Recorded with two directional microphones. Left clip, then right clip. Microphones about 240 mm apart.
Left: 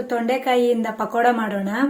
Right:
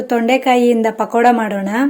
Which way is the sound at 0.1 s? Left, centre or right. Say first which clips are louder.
Right 7 dB; right.